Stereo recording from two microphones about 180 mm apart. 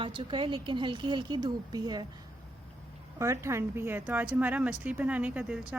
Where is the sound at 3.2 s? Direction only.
15° right (ahead or behind).